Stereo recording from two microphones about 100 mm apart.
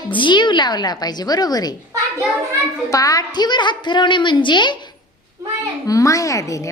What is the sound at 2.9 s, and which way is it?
A woman's voice, 35° left (ahead or behind).